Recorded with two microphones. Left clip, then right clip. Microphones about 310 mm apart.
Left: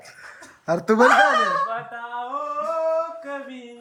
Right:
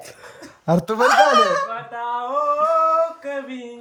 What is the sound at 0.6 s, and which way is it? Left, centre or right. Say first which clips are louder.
Speech: left 1 dB; right.